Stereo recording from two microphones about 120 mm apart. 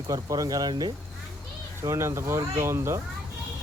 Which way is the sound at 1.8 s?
25° right (ahead or behind).